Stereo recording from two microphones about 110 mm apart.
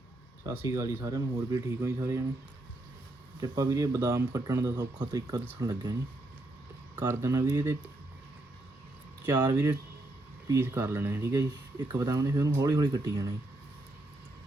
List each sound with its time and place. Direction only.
0.5 s speech: 25° right (ahead or behind)
3.4 s speech: 35° right (ahead or behind)
7.1 s speech: 25° right (ahead or behind)
9.3 s speech: 35° right (ahead or behind)
10.5 s speech: 20° right (ahead or behind)